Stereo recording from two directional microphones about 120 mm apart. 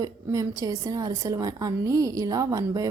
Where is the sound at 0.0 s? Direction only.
30° right (ahead or behind).